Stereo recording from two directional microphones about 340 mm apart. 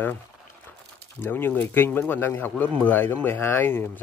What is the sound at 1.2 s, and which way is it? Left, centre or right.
Speech, centre.